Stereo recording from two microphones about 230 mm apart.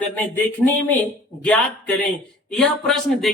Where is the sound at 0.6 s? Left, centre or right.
Centre.